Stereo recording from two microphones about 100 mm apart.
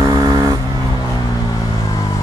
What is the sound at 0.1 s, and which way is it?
Vehicle, 40° right (ahead or behind).